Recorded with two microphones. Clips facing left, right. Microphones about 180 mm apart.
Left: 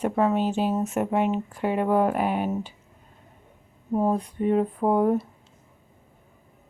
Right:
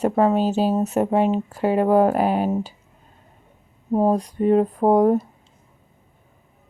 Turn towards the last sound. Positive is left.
turn(degrees=-40)  # may be behind; listen again after turning